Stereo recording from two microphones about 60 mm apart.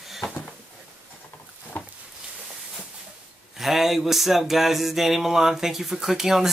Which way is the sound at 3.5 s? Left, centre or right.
Centre.